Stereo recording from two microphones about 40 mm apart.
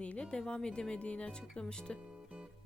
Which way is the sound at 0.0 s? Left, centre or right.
Left.